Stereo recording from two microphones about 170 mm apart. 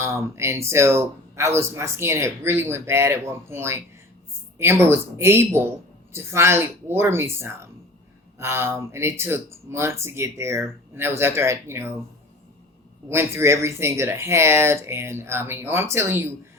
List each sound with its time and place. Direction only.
0.0 s speech: 15° right (ahead or behind)
13.1 s speech: 15° right (ahead or behind)